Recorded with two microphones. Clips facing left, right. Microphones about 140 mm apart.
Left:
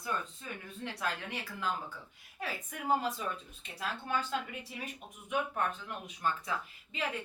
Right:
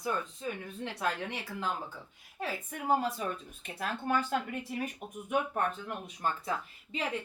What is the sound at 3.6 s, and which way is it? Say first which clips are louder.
Speech: right 5 dB; 55° right (ahead or behind).